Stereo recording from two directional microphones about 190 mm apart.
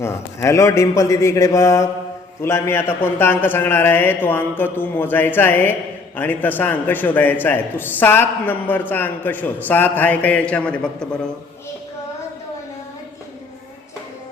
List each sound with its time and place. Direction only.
0.0 s a man's voice: 15° left (ahead or behind)